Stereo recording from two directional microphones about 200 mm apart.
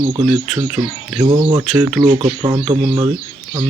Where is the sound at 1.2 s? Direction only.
25° right (ahead or behind).